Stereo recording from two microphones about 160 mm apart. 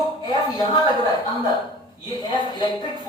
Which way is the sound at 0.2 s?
25° left (ahead or behind).